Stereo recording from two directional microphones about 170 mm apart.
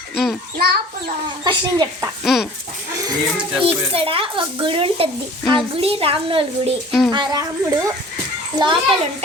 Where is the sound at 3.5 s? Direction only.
35° right (ahead or behind).